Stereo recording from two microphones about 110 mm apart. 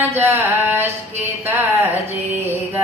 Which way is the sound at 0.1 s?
20° right (ahead or behind).